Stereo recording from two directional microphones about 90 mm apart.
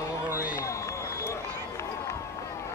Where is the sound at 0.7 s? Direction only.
35° left (ahead or behind).